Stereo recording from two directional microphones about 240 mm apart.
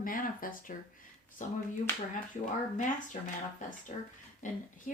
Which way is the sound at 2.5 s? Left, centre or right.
Left.